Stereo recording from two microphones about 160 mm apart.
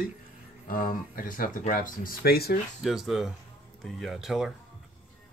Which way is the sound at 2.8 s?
Centre (ahead or behind).